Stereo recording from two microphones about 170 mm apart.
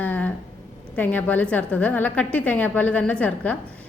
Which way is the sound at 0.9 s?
10° left (ahead or behind).